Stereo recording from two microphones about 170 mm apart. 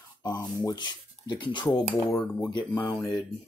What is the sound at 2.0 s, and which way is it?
Speech, 5° left (ahead or behind).